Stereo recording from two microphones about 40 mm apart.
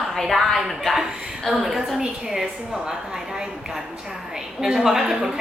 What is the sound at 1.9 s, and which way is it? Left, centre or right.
A woman's voice, centre.